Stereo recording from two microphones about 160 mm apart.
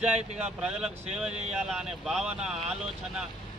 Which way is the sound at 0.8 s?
5° right (ahead or behind).